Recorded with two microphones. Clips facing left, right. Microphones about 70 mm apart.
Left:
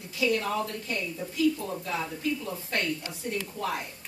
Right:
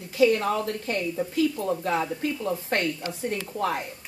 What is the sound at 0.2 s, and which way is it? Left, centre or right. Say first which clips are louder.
A woman's voice: right 6 dB; right.